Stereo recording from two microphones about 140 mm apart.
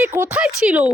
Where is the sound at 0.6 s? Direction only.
5° right (ahead or behind).